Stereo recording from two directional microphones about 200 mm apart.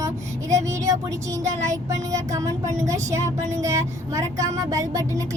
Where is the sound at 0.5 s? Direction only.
15° right (ahead or behind).